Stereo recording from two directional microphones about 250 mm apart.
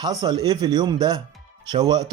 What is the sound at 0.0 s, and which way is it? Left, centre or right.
Speech, centre.